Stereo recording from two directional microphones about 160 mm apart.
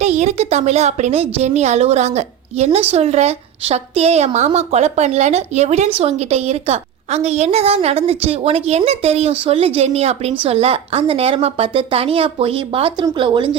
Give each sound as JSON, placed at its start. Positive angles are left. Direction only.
{"t": 0.0, "sound": "a woman's voice", "side_deg": -45}